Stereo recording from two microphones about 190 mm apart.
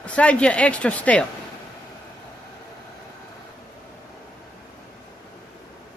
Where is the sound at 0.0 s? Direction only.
5° left (ahead or behind).